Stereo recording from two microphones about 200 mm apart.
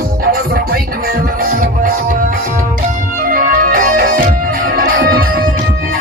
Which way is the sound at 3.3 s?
45° right (ahead or behind).